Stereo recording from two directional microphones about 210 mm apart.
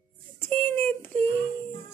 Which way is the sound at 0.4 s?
10° left (ahead or behind).